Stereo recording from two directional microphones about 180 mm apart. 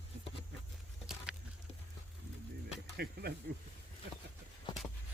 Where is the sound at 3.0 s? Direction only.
60° right (ahead or behind).